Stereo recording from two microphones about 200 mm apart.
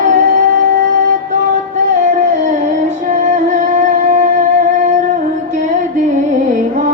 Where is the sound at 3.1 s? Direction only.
40° right (ahead or behind).